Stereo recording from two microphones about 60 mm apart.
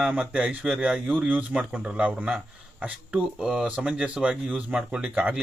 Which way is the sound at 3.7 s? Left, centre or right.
Centre.